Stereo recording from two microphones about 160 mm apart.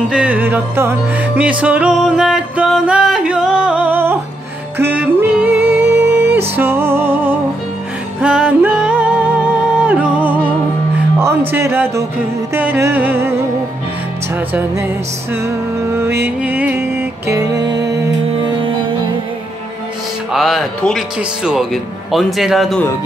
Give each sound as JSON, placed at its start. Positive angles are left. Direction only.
{"t": 0.1, "sound": "music", "side_deg": -10}
{"t": 11.1, "sound": "speech", "side_deg": -15}
{"t": 12.5, "sound": "music", "side_deg": -15}
{"t": 20.3, "sound": "speech", "side_deg": 0}